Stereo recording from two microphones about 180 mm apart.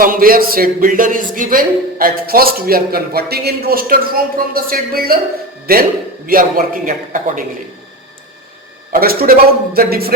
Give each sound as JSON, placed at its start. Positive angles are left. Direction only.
{"t": 0.0, "sound": "speech", "side_deg": -50}
{"t": 8.9, "sound": "speech", "side_deg": -55}